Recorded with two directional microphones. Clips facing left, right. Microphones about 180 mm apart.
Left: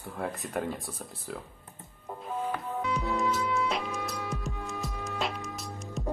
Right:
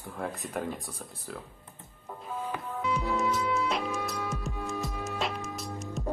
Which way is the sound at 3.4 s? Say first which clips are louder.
Even; 20° right (ahead or behind).